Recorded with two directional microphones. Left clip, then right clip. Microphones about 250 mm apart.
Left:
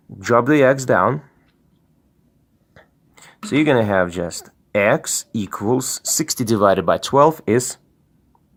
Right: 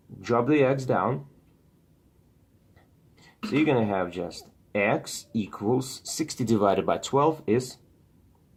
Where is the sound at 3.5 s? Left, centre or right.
Left.